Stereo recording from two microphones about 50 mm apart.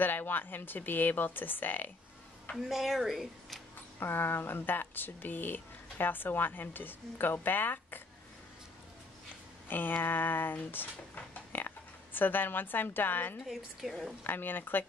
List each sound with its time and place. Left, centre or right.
0.0 s speech: left
2.5 s speech: centre
4.0 s speech: left
9.7 s speech: left
13.5 s speech: centre
14.2 s speech: left